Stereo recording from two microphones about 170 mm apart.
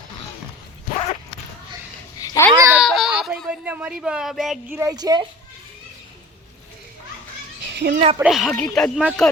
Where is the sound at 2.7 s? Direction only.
5° right (ahead or behind).